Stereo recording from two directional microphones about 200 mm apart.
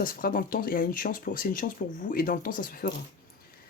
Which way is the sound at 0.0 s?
45° left (ahead or behind).